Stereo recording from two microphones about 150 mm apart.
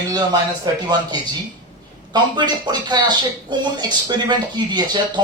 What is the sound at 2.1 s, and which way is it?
Speech, 30° right (ahead or behind).